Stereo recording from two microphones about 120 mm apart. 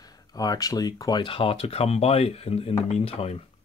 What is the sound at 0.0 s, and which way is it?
Speech, 30° left (ahead or behind).